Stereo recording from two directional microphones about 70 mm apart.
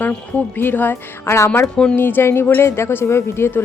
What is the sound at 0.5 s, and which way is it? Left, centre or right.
Speech, left.